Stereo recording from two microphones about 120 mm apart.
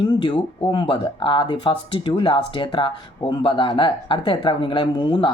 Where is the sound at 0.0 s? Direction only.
45° left (ahead or behind).